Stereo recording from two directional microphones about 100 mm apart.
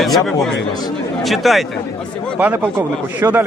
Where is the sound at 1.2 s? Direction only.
Centre (ahead or behind).